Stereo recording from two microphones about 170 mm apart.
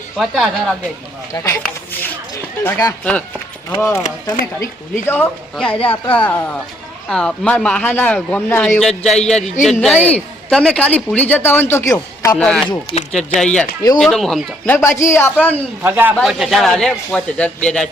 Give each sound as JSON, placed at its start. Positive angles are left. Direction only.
{"t": 0.2, "sound": "speech", "side_deg": 0}
{"t": 1.3, "sound": "speech", "side_deg": 15}
{"t": 1.6, "sound": "a sound", "side_deg": 10}
{"t": 3.0, "sound": "speech", "side_deg": 5}
{"t": 5.0, "sound": "speech", "side_deg": 10}
{"t": 12.4, "sound": "speech", "side_deg": 5}
{"t": 12.9, "sound": "speech", "side_deg": 40}
{"t": 13.1, "sound": "speech", "side_deg": 5}
{"t": 14.8, "sound": "speech", "side_deg": 15}
{"t": 15.8, "sound": "speech", "side_deg": -10}
{"t": 16.1, "sound": "speech", "side_deg": 0}